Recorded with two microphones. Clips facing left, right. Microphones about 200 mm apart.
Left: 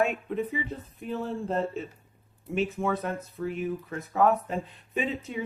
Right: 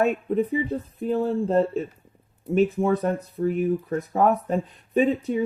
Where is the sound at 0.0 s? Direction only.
35° right (ahead or behind).